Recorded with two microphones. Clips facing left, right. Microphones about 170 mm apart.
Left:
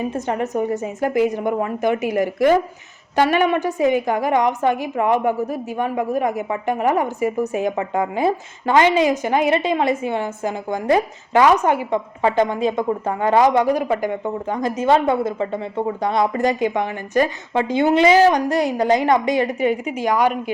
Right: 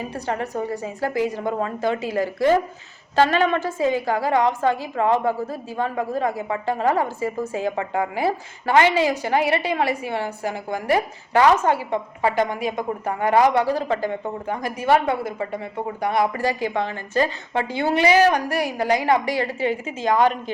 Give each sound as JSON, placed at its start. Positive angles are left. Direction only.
{"t": 0.0, "sound": "a woman's voice", "side_deg": 20}